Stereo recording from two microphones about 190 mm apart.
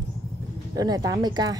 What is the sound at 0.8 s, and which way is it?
Speech, 20° right (ahead or behind).